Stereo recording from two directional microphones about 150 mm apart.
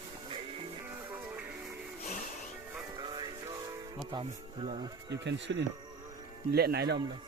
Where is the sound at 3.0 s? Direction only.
30° right (ahead or behind).